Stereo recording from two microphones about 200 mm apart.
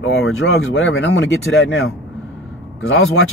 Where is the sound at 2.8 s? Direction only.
90° left.